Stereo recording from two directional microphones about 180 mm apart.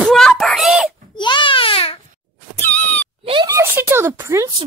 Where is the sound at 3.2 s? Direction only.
30° right (ahead or behind).